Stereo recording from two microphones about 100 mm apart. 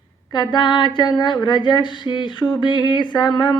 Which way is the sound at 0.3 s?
50° left (ahead or behind).